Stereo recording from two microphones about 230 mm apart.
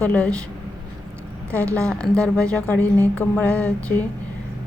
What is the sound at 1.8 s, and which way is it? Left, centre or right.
Speech, centre.